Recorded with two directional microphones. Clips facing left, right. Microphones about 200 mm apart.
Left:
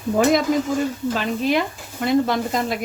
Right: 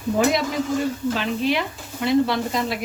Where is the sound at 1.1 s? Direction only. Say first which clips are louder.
Left 5 dB; 45° left (ahead or behind).